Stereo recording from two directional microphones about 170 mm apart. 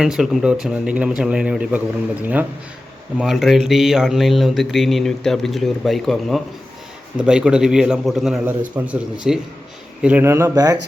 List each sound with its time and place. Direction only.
0.0 s mantra: 5° right (ahead or behind)
2.2 s speech: 10° right (ahead or behind)
3.2 s mantra: centre (ahead or behind)
8.8 s speech: 15° right (ahead or behind)
9.2 s mantra: centre (ahead or behind)
10.0 s speech: 10° right (ahead or behind)